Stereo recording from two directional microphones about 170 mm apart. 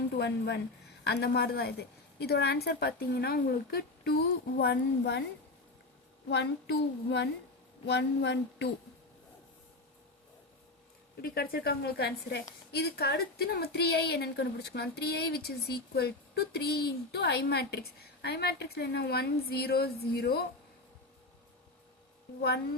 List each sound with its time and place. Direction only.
0.2 s a woman's voice: 75° left (ahead or behind)
6.2 s child singing: 85° left
11.2 s a woman's voice: 65° left (ahead or behind)
22.4 s a woman's voice: 70° left (ahead or behind)